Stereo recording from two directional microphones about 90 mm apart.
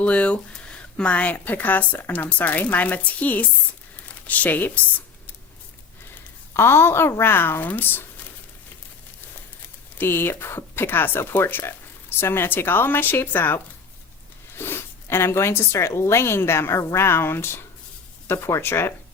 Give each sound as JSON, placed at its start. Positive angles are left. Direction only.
{"t": 0.0, "sound": "speech", "side_deg": 15}
{"t": 6.5, "sound": "speech", "side_deg": 25}
{"t": 10.0, "sound": "speech", "side_deg": 25}